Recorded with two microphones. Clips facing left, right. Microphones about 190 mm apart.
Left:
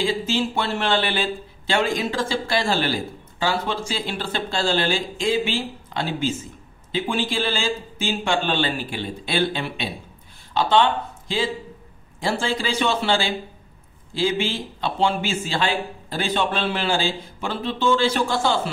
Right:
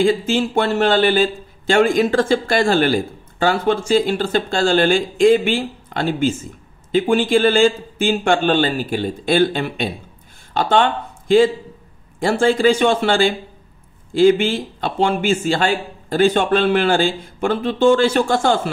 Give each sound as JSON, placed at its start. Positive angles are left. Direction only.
{"t": 0.0, "sound": "a man's voice", "side_deg": -50}